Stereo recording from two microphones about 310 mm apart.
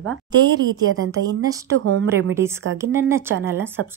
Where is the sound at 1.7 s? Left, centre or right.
Right.